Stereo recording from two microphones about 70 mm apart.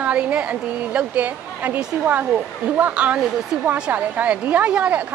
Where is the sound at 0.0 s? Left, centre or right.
Centre.